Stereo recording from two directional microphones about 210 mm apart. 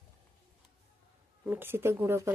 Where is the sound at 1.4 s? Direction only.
10° right (ahead or behind).